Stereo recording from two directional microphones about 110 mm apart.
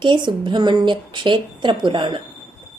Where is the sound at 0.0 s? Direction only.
45° right (ahead or behind).